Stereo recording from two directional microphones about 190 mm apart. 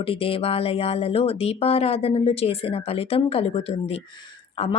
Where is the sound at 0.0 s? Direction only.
30° left (ahead or behind).